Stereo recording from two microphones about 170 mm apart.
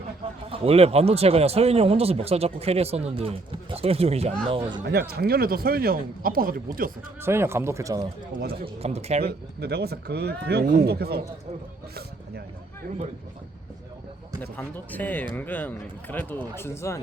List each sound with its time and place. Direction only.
0.5 s speech: 35° right (ahead or behind)
4.9 s speech: 65° right (ahead or behind)
7.2 s speech: 15° right (ahead or behind)
8.6 s speech: 35° right (ahead or behind)
9.2 s speech: 70° right (ahead or behind)
14.5 s speech: 10° left (ahead or behind)